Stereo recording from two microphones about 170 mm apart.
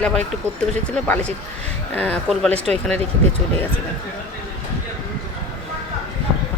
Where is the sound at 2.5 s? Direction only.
40° right (ahead or behind).